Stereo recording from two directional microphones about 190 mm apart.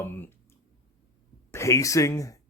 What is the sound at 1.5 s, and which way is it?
Speech, 15° left (ahead or behind).